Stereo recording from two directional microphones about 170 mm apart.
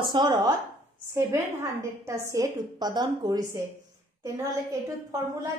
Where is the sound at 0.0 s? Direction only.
25° right (ahead or behind).